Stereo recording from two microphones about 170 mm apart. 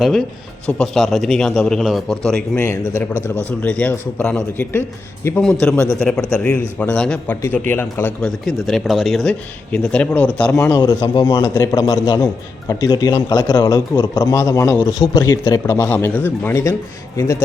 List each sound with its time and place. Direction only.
0.0 s a man's voice: centre (ahead or behind)
10.8 s a man's voice: 25° left (ahead or behind)